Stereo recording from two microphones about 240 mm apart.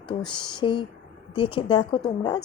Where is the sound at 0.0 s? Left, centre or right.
Centre.